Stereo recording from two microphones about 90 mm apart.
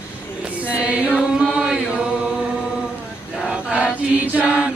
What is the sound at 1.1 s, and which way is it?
Chant, 5° right (ahead or behind).